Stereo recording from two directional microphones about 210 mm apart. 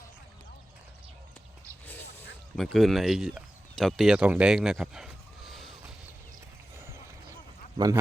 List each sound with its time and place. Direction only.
1.9 s a sound: 10° left (ahead or behind)
6.7 s clip-clop: 10° right (ahead or behind)
7.8 s a man's voice: 20° right (ahead or behind)